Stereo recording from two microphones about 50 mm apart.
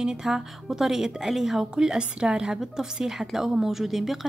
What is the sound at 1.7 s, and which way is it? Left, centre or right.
A woman's voice, centre.